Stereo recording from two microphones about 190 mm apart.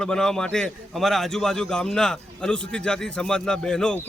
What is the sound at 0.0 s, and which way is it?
A man's voice, 5° left (ahead or behind).